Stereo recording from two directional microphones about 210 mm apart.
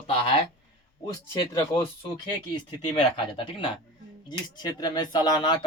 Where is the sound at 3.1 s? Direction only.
25° left (ahead or behind).